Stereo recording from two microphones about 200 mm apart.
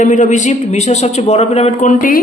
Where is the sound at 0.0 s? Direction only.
40° left (ahead or behind).